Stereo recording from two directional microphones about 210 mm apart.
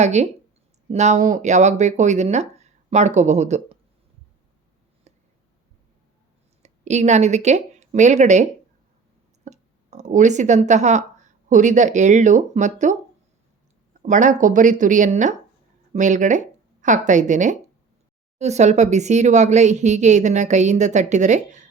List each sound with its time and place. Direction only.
0.0 s speech: 35° right (ahead or behind)
5.1 s a sound: 30° right (ahead or behind)
6.6 s speech: 35° right (ahead or behind)
14.0 s speech: 35° right (ahead or behind)